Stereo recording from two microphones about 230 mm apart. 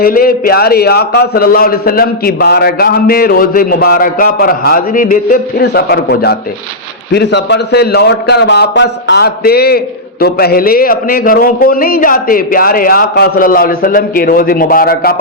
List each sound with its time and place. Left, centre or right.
0.0 s a man's voice: left